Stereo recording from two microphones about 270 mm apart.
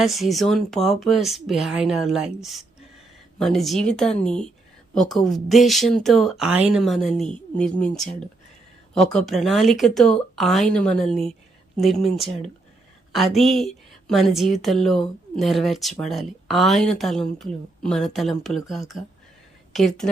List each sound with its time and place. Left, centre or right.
0.0 s a woman's voice: centre
9.1 s a woman's voice: centre